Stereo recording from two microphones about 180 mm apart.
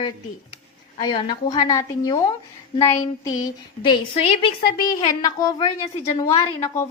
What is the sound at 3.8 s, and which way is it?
A woman's voice, 30° left (ahead or behind).